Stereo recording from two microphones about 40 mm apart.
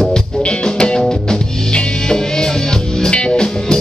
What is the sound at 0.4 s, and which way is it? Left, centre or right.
Music, left.